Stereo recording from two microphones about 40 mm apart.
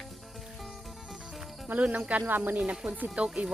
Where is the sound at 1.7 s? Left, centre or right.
Right.